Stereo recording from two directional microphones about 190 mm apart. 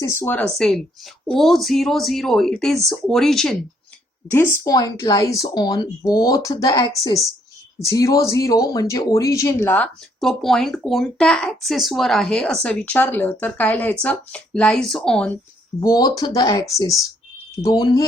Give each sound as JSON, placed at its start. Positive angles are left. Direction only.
{"t": 0.0, "sound": "speech", "side_deg": 15}
{"t": 15.8, "sound": "speech", "side_deg": 20}